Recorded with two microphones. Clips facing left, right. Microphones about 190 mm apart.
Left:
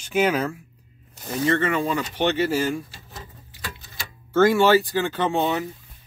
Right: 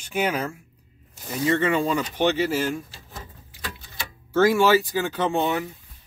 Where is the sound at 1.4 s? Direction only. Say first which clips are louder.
Even; 15° right (ahead or behind).